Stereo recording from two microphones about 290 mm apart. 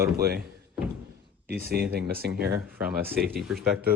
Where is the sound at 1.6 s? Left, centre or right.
Right.